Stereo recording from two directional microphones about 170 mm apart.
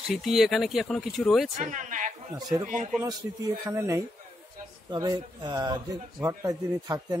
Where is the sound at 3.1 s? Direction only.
20° right (ahead or behind).